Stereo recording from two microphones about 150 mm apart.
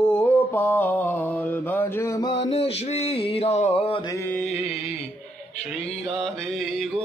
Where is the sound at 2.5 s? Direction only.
45° left (ahead or behind).